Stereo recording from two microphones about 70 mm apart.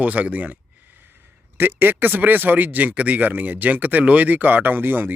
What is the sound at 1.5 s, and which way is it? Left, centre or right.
Speech, right.